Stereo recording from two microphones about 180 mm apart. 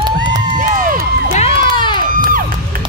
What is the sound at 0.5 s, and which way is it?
Cheering, 50° right (ahead or behind).